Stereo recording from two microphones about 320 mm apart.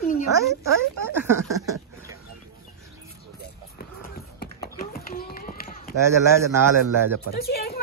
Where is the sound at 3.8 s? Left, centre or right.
Left.